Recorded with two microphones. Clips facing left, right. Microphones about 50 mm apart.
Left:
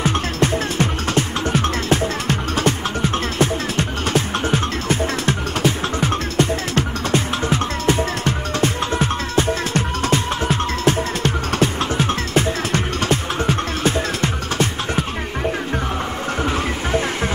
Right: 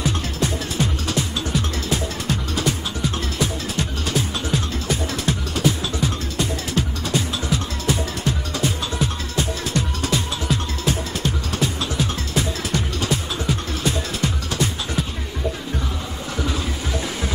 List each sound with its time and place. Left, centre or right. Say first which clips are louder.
0.0 s music: left 5 dB; left
16.3 s music: left 3 dB; left